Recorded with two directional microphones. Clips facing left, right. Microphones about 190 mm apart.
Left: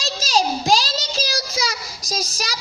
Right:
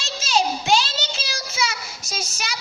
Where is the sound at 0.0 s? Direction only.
35° left (ahead or behind).